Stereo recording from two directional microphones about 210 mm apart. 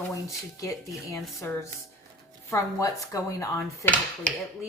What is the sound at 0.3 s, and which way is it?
Speech, 15° left (ahead or behind).